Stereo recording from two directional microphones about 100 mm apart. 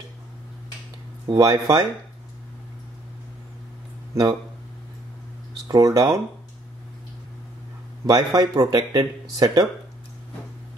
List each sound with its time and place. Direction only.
1.2 s speech: 40° right (ahead or behind)
4.1 s speech: 30° right (ahead or behind)
5.7 s speech: 40° right (ahead or behind)
8.1 s speech: 45° right (ahead or behind)